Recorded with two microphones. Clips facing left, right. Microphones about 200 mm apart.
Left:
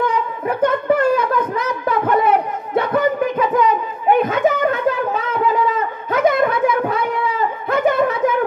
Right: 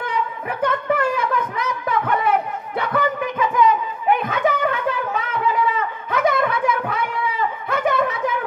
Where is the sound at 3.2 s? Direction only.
40° left (ahead or behind).